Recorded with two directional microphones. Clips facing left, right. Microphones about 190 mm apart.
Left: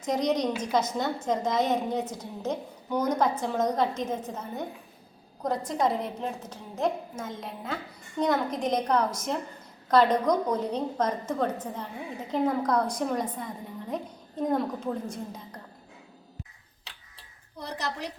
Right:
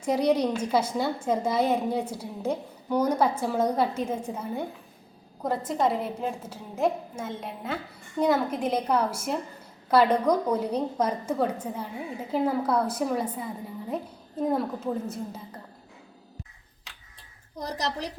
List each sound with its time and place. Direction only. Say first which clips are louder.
0.0 s a woman's voice: right 3 dB; 10° right (ahead or behind)